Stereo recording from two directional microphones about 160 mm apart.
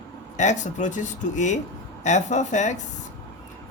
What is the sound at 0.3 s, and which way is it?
Speech, 50° left (ahead or behind).